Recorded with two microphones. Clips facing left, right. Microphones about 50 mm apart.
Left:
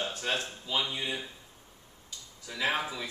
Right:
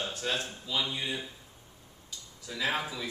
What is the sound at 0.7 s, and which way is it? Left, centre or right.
Speech, centre.